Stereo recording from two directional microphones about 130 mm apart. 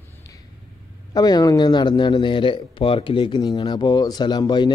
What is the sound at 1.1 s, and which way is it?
Speech, 30° left (ahead or behind).